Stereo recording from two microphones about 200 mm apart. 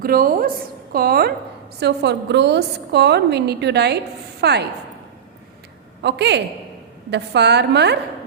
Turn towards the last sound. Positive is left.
turn(degrees=-55)  # may be behind; listen again after turning